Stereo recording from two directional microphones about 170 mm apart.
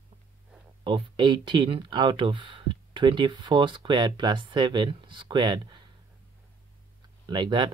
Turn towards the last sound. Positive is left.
turn(degrees=-30)  # may be behind; listen again after turning